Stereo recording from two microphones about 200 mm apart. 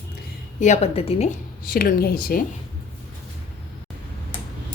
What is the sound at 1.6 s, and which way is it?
Speech, 50° left (ahead or behind).